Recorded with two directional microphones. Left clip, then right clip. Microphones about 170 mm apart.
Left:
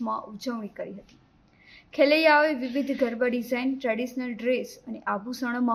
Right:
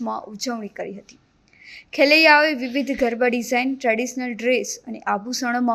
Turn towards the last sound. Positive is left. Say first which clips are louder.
# right 6 dB
turn(degrees=-20)  # may be behind; listen again after turning